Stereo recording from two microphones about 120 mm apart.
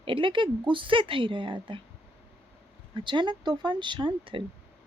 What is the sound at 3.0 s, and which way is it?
Speech, 40° right (ahead or behind).